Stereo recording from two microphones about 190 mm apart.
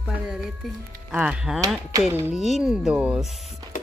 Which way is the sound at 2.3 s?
Centre (ahead or behind).